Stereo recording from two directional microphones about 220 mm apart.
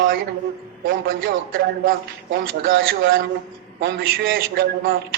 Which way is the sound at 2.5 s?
40° right (ahead or behind).